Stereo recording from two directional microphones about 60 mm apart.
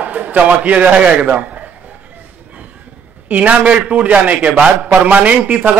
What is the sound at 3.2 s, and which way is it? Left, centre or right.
A man's voice, right.